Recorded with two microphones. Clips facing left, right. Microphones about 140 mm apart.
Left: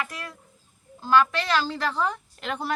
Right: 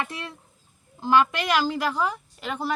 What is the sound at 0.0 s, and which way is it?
A woman's voice, 25° right (ahead or behind).